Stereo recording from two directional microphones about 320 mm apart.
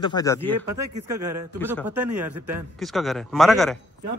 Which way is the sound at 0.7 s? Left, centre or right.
Right.